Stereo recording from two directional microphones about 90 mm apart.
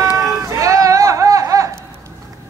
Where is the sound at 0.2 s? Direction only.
35° right (ahead or behind).